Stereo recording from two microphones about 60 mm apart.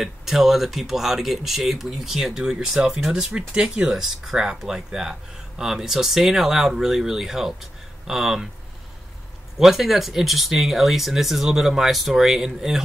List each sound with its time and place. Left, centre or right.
0.0 s speech: centre
9.6 s speech: centre